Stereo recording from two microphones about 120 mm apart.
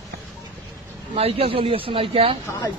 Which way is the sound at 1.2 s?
55° right (ahead or behind).